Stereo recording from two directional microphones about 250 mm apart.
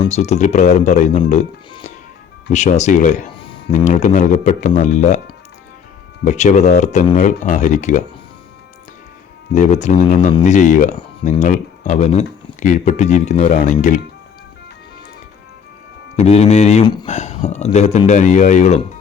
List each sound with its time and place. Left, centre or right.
0.0 s speech: left
6.2 s speech: left
9.6 s speech: left
16.1 s speech: left